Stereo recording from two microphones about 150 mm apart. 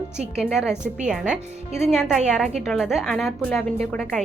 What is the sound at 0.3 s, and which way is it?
Speech, 5° right (ahead or behind).